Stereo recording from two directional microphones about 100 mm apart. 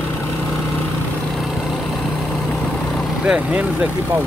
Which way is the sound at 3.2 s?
10° right (ahead or behind).